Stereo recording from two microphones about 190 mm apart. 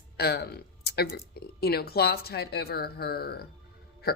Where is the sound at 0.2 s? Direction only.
55° left (ahead or behind).